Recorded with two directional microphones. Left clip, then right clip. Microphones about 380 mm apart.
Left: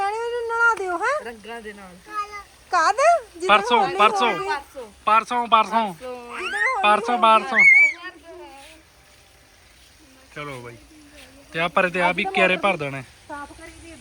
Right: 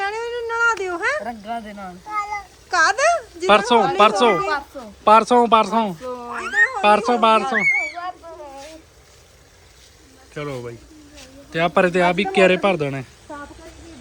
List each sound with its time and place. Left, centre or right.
0.0 s a sound: centre
1.5 s speech: centre
2.6 s babbling: centre
3.4 s speech: centre
10.3 s speech: centre